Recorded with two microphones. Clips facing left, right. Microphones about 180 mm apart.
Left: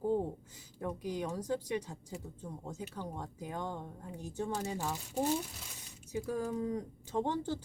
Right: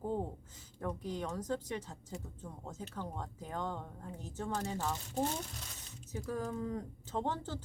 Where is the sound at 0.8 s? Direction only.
10° left (ahead or behind).